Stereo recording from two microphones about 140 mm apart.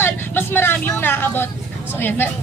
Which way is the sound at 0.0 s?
15° left (ahead or behind).